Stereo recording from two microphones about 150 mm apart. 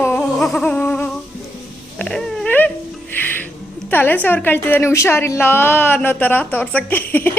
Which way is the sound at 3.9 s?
15° left (ahead or behind).